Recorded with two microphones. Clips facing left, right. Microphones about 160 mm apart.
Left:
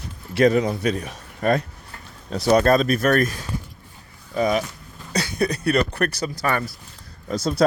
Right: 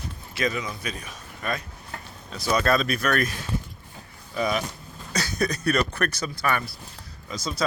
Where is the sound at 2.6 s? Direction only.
45° left (ahead or behind).